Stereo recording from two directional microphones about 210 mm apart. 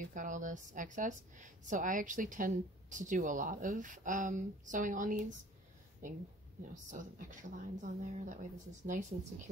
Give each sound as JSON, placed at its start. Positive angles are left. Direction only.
{"t": 0.0, "sound": "speech", "side_deg": -40}
{"t": 6.7, "sound": "speech", "side_deg": -35}